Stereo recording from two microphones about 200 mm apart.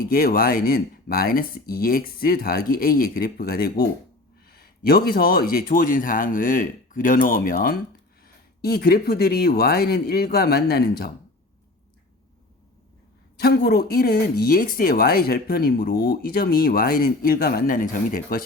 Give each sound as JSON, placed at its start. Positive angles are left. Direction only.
{"t": 0.0, "sound": "speech", "side_deg": 45}
{"t": 4.9, "sound": "speech", "side_deg": 50}
{"t": 13.4, "sound": "speech", "side_deg": 50}